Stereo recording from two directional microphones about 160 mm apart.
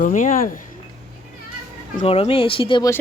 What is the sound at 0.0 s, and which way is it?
Speech, 55° left (ahead or behind).